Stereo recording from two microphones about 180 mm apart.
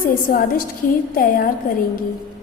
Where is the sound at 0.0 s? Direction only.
50° left (ahead or behind).